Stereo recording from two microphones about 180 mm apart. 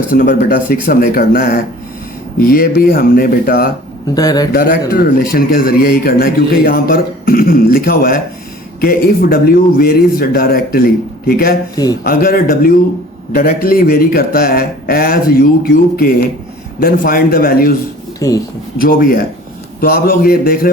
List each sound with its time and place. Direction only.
0.1 s speech: 50° left (ahead or behind)
4.1 s a man's voice: 20° left (ahead or behind)
4.5 s speech: 50° left (ahead or behind)
18.2 s speech: 20° left (ahead or behind)
18.8 s speech: 50° left (ahead or behind)